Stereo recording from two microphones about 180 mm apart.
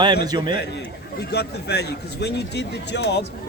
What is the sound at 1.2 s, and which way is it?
A man's voice, 65° left (ahead or behind).